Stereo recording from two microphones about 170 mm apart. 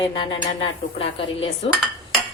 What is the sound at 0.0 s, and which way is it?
A woman's voice, 30° left (ahead or behind).